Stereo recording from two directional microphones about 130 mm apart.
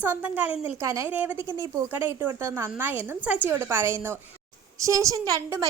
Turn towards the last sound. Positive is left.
turn(degrees=-25)  # may be behind; listen again after turning